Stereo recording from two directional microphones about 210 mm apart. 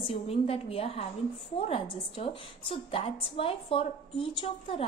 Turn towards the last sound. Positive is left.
turn(degrees=25)  # may be behind; listen again after turning